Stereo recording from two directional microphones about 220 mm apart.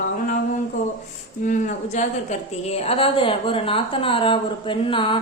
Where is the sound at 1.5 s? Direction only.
35° left (ahead or behind).